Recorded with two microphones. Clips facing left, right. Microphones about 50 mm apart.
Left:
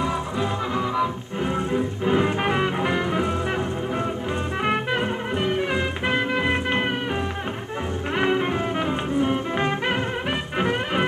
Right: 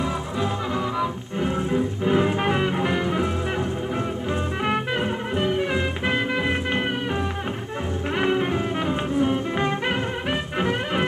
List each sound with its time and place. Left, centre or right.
0.4 s music: centre
4.6 s music: centre
8.2 s music: centre